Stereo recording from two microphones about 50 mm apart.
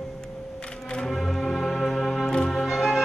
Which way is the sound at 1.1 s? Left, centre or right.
Centre.